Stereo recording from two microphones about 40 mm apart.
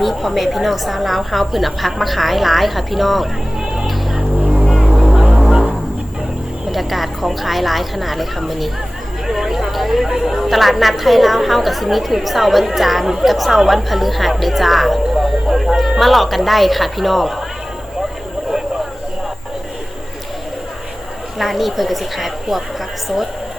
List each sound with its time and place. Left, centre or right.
0.0 s a woman's voice: centre
4.7 s music: centre
6.7 s a woman's voice: centre
9.2 s a sound: centre
10.2 s a woman's voice: centre
15.2 s a sound: centre
15.8 s a woman's voice: centre
21.3 s a woman's voice: centre